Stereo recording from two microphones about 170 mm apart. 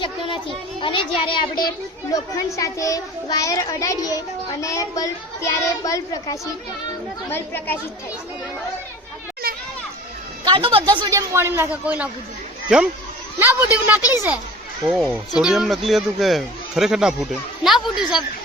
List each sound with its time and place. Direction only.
0.8 s a child's voice: 30° left (ahead or behind); by 7.8 s 10° left (ahead or behind)
10.4 s a man's voice: 30° right (ahead or behind); by 14.3 s 10° right (ahead or behind)
15.4 s speech: 5° right (ahead or behind)